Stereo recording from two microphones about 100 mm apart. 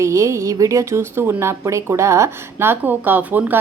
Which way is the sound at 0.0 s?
30° right (ahead or behind).